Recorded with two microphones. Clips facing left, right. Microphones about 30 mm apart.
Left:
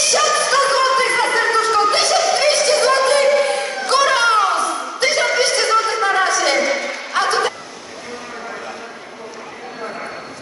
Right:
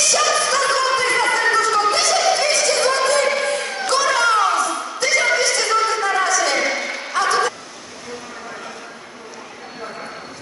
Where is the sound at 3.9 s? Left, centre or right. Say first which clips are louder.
Left 2 dB; left.